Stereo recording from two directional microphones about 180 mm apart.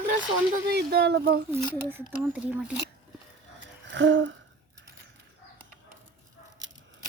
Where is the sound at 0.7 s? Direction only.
65° right (ahead or behind).